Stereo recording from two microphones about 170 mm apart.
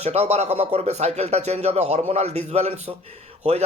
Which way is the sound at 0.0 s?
40° right (ahead or behind).